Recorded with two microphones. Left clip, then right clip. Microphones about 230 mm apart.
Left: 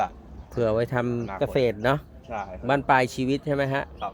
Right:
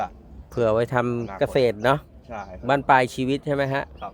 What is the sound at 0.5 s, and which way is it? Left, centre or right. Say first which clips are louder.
Speech: right 3 dB; centre.